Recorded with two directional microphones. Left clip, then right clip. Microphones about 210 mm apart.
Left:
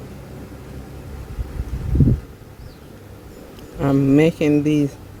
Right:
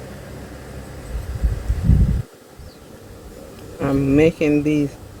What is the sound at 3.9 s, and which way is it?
Speech, 40° left (ahead or behind).